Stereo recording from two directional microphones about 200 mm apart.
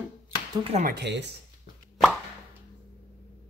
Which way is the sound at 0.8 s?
50° right (ahead or behind).